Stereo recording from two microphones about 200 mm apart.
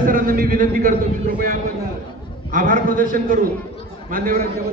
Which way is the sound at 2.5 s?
45° right (ahead or behind).